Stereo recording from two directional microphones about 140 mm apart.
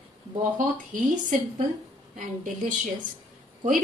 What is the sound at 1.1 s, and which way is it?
Speech, 60° right (ahead or behind).